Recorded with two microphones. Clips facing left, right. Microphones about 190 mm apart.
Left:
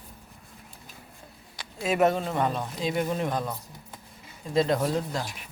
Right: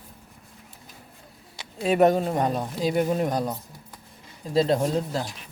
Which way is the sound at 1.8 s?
35° right (ahead or behind).